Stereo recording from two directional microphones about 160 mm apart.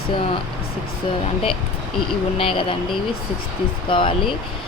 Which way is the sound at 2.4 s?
35° left (ahead or behind).